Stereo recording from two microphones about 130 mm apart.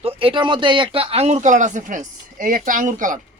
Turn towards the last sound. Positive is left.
turn(degrees=-85)